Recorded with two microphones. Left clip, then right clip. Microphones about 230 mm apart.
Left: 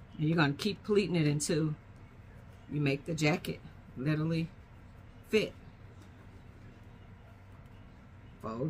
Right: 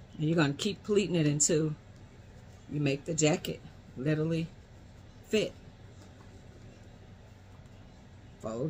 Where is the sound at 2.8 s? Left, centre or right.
Centre.